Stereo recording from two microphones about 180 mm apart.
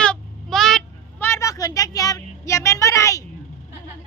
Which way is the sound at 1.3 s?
15° left (ahead or behind).